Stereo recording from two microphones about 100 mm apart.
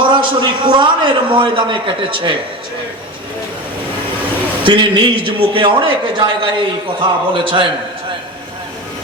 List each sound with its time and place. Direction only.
0.0 s a man's voice: 55° right (ahead or behind)
4.6 s a man's voice: 55° right (ahead or behind)